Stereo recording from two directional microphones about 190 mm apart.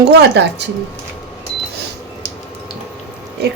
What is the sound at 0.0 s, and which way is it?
Speech, 60° right (ahead or behind).